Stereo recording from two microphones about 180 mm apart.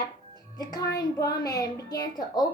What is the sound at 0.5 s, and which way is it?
A woman's voice, 20° left (ahead or behind).